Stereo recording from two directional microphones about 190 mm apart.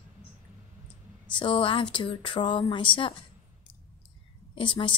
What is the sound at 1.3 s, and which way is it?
Speech, 25° left (ahead or behind).